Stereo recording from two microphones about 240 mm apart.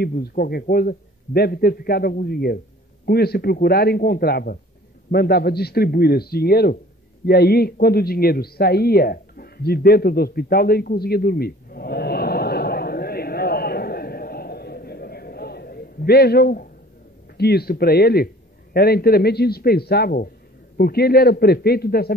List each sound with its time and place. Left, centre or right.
0.0 s a man's voice: left
7.2 s a sound: left
17.4 s a man's voice: left